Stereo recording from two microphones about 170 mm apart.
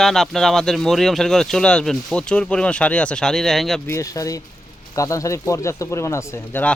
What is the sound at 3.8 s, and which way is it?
Speech, 20° left (ahead or behind).